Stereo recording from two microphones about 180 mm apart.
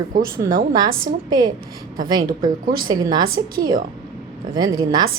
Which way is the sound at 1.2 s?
25° right (ahead or behind).